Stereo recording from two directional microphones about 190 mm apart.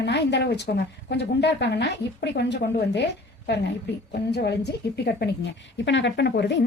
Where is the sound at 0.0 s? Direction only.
65° left (ahead or behind).